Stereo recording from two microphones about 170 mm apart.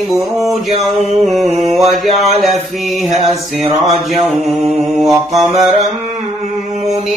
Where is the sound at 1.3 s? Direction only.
45° right (ahead or behind).